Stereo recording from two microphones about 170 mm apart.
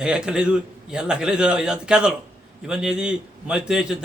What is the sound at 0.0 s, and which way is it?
A man's voice, 5° right (ahead or behind).